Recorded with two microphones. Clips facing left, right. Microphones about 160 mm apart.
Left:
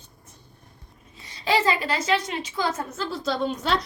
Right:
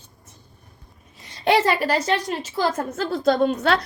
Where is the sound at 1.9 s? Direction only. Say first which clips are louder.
Right 3 dB; 40° right (ahead or behind); by 3.8 s 60° right (ahead or behind).